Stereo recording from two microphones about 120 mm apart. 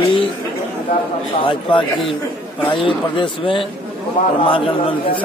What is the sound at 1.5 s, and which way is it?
A man's voice, 45° left (ahead or behind).